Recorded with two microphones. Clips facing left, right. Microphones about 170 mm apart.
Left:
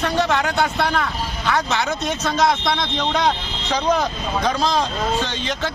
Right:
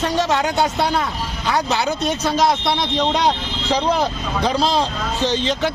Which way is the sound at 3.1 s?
35° right (ahead or behind).